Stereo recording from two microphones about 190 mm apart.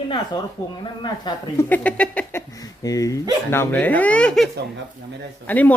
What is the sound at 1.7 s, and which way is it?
Speech, 10° left (ahead or behind).